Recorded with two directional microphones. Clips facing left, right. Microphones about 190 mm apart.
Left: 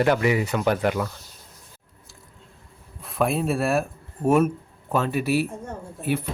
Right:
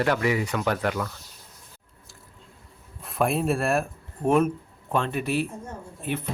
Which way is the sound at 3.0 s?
Centre (ahead or behind).